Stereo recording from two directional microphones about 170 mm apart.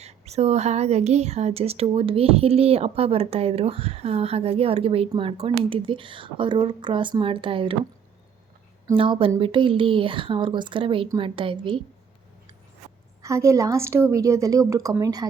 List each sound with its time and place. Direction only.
0.0 s speech: 40° right (ahead or behind)
9.0 s a woman's voice: 30° right (ahead or behind)
13.2 s a woman's voice: 20° right (ahead or behind)